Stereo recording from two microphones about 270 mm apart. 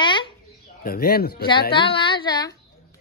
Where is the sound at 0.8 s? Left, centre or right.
Left.